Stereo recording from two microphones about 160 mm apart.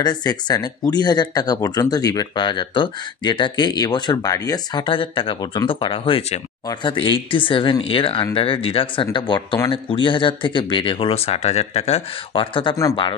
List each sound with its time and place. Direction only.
0.0 s speech: 25° left (ahead or behind)